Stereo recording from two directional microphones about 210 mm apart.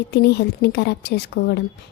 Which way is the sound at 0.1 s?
50° left (ahead or behind).